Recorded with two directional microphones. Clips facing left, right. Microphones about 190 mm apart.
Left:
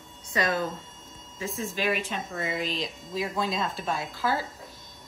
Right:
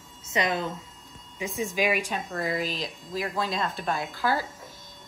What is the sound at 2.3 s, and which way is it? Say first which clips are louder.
A woman's voice: right 2 dB; centre (ahead or behind).